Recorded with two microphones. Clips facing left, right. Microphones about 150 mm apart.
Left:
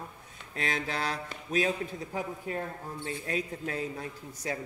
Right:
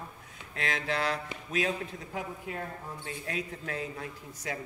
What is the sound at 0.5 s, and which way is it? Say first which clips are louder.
Speech: right 1 dB; 40° left (ahead or behind).